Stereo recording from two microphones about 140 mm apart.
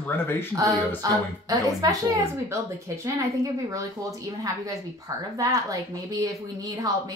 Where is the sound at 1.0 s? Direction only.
25° right (ahead or behind).